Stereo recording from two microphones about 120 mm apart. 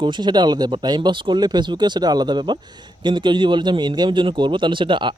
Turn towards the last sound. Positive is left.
turn(degrees=-40)  # may be behind; listen again after turning